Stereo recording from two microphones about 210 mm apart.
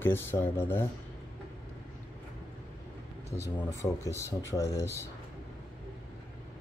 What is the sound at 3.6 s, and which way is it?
Speech, 15° left (ahead or behind).